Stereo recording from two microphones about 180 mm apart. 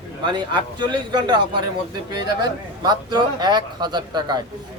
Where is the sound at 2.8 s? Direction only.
25° right (ahead or behind).